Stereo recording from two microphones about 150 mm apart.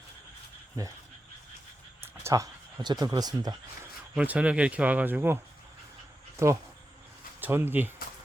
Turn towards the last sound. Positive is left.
turn(degrees=-15)  # may be behind; listen again after turning